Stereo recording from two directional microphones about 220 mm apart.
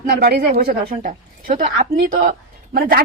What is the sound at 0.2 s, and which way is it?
Speech, 45° right (ahead or behind).